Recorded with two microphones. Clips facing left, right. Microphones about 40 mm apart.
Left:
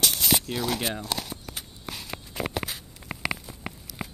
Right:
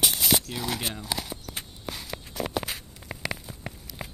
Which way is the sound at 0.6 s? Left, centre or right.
Centre.